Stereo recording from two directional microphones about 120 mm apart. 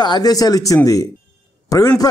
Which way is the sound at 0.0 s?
35° left (ahead or behind).